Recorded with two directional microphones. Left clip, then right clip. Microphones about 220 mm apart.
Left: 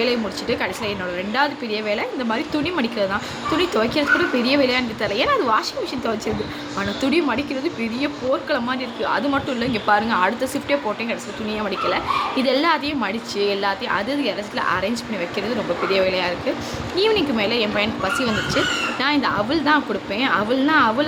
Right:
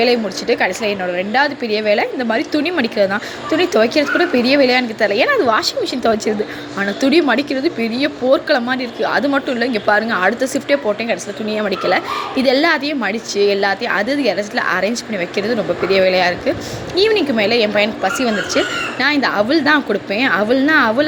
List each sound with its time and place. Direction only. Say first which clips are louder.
0.0 s speech: right 6 dB; 15° right (ahead or behind)